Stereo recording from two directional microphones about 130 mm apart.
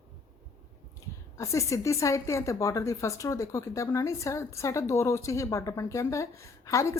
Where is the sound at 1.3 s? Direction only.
25° left (ahead or behind).